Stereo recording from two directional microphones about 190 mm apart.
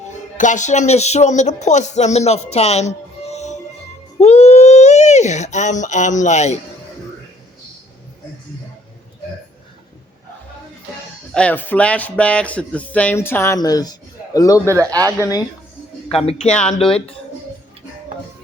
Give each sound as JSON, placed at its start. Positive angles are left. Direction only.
{"t": 0.3, "sound": "speech", "side_deg": 40}
{"t": 4.2, "sound": "a sound", "side_deg": 35}
{"t": 11.3, "sound": "speech", "side_deg": 10}
{"t": 14.6, "sound": "speech", "side_deg": -15}
{"t": 16.2, "sound": "speech", "side_deg": 30}